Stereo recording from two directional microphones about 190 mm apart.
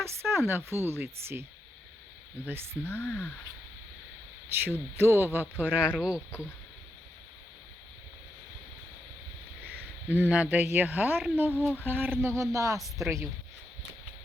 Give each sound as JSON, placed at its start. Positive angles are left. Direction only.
{"t": 0.0, "sound": "speech", "side_deg": -15}
{"t": 2.8, "sound": "speech", "side_deg": 5}
{"t": 4.4, "sound": "speech", "side_deg": -10}
{"t": 10.1, "sound": "speech", "side_deg": -10}